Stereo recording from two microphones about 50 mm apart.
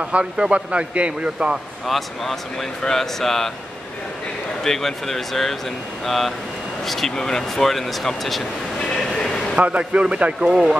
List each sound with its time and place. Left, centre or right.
0.0 s a man's voice: centre
1.9 s speech: centre
4.6 s speech: centre
8.7 s a sound: centre
9.6 s a man's voice: right